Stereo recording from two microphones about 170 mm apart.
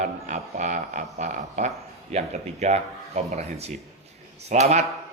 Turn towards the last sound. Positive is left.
turn(degrees=-40)  # may be behind; listen again after turning